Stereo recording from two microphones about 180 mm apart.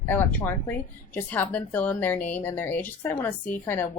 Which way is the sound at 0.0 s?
10° left (ahead or behind).